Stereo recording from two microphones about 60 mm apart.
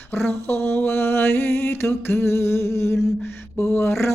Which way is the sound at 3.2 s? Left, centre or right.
Left.